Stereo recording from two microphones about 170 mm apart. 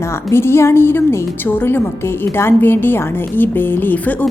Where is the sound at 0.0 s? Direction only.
15° left (ahead or behind).